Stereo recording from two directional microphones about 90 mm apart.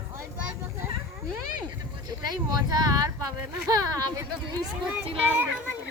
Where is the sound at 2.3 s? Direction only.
45° right (ahead or behind).